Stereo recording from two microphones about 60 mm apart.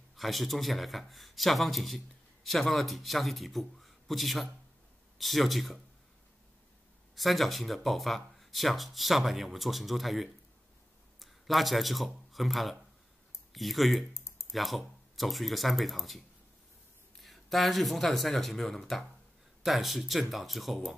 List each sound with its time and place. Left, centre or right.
0.1 s a man's voice: centre
7.2 s a man's voice: centre
14.1 s typing: left
14.5 s a man's voice: centre